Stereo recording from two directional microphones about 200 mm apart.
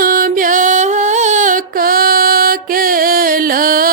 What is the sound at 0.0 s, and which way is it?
Music, 45° right (ahead or behind).